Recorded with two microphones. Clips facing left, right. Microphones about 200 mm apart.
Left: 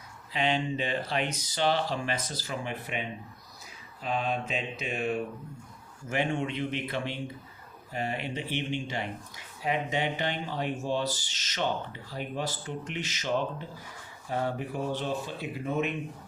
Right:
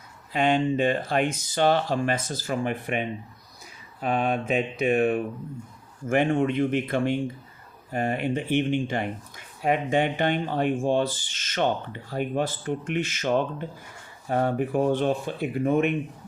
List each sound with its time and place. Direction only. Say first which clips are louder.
0.3 s speech: right 7 dB; 50° right (ahead or behind)
4.0 s speech: right 6 dB; 55° right (ahead or behind)